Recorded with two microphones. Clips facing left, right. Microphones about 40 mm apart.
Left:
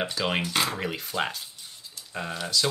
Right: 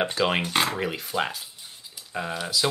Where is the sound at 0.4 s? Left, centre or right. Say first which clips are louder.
Right 2 dB; right.